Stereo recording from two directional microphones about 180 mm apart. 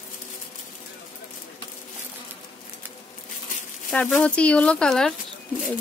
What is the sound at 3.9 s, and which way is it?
Speech, 5° left (ahead or behind).